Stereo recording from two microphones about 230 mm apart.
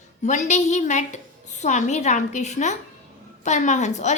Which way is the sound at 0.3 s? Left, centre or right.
Left.